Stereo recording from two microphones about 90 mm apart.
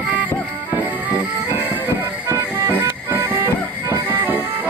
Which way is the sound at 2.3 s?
25° right (ahead or behind).